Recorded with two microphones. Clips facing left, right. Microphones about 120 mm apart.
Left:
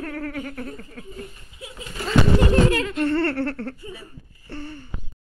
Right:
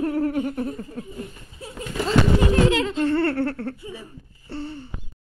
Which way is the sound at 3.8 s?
15° right (ahead or behind).